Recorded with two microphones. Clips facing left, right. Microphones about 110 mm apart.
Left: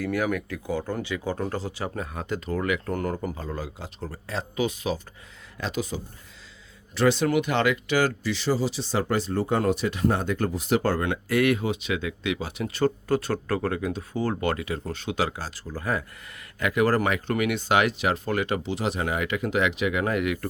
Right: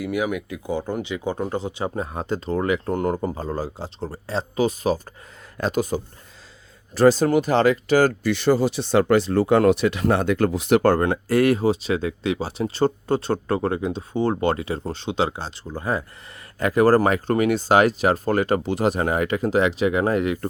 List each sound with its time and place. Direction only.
0.0 s speech: 15° right (ahead or behind); by 11.0 s 60° right (ahead or behind)
11.0 s speech: 40° right (ahead or behind)